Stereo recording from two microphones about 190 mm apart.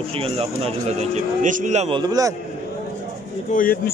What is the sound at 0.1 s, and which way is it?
A man's voice, 30° right (ahead or behind).